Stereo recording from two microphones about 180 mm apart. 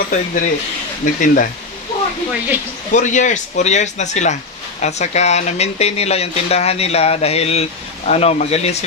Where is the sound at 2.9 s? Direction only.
45° left (ahead or behind).